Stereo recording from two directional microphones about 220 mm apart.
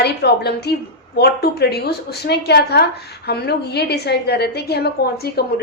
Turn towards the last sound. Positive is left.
turn(degrees=45)  # may be behind; listen again after turning